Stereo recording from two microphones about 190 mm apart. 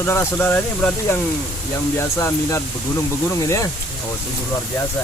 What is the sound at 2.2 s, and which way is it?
Speech, 15° left (ahead or behind).